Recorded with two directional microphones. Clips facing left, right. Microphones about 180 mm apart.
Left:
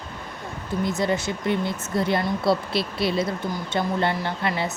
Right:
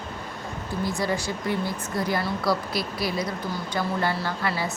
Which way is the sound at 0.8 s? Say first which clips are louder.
Left 3 dB; 20° left (ahead or behind).